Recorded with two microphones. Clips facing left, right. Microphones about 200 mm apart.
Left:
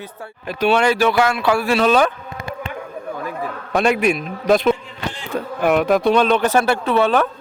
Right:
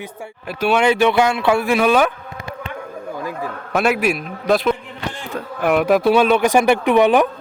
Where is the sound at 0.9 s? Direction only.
20° right (ahead or behind).